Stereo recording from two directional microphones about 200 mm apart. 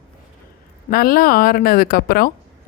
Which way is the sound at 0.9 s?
50° left (ahead or behind).